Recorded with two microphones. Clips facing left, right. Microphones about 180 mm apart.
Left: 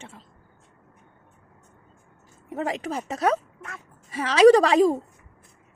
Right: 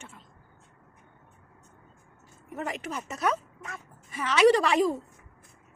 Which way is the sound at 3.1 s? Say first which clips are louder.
Left 5 dB; 90° left.